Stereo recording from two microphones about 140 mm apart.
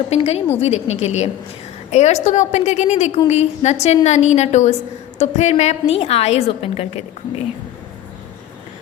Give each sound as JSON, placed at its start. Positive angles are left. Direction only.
{"t": 0.1, "sound": "a woman's voice", "side_deg": 45}